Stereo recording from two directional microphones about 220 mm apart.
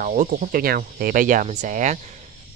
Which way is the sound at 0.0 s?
35° right (ahead or behind).